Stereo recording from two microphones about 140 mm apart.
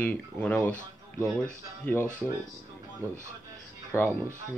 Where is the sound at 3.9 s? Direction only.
15° left (ahead or behind).